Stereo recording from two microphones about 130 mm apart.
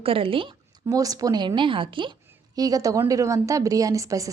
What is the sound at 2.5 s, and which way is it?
A woman's voice, 30° right (ahead or behind).